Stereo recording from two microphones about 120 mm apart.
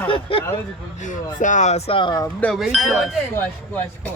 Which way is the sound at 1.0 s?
90° left.